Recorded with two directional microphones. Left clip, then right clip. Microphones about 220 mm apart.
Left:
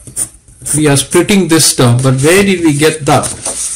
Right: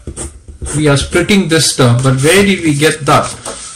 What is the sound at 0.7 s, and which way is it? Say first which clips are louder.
A man's voice: left 2 dB; 30° left (ahead or behind).